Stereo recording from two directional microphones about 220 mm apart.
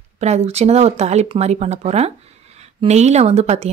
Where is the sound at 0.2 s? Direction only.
30° right (ahead or behind).